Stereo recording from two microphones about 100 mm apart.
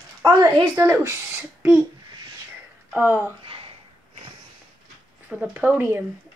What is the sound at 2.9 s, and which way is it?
Speech, 20° right (ahead or behind).